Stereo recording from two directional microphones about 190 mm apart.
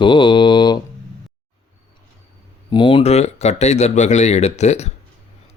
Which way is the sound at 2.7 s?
25° left (ahead or behind).